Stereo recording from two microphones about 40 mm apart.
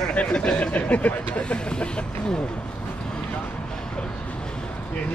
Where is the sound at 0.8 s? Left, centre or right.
Left.